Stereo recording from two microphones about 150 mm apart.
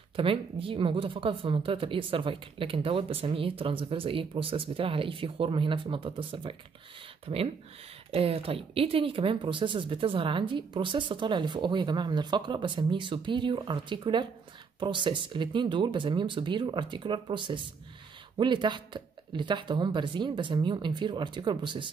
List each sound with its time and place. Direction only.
0.1 s speech: 35° right (ahead or behind)